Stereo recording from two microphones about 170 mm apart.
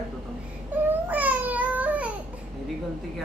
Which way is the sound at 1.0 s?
10° right (ahead or behind).